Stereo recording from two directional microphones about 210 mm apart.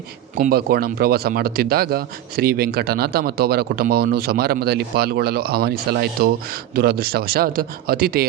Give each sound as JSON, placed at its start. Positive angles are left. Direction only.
{"t": 0.3, "sound": "speech", "side_deg": -45}